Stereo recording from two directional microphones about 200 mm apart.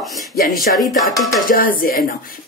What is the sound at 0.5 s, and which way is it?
Speech, centre (ahead or behind).